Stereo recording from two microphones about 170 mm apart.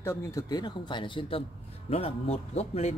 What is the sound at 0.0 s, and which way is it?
A man's voice, 20° left (ahead or behind).